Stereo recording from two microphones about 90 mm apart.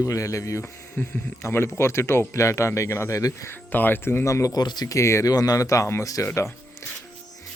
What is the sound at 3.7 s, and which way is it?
Speech, 20° left (ahead or behind).